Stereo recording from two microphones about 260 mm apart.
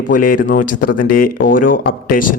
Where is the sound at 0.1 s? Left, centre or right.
Left.